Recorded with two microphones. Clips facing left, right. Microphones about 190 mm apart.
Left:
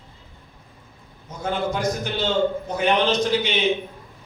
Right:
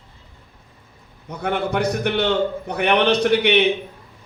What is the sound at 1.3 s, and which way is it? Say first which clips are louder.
A man's voice: right 2 dB; 65° right (ahead or behind).